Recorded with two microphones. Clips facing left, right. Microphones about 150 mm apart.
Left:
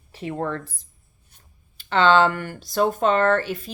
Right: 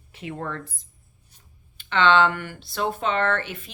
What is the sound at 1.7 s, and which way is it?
Speech, 40° left (ahead or behind).